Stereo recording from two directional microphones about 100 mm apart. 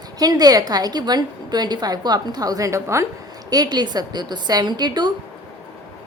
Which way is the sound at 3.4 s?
40° right (ahead or behind).